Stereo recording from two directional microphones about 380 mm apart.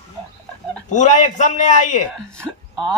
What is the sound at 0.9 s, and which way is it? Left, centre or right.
Speech, centre.